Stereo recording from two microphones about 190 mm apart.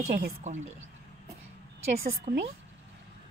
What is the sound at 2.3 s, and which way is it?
Speech, 35° right (ahead or behind).